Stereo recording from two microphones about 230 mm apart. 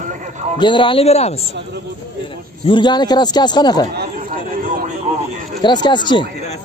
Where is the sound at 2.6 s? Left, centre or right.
Left.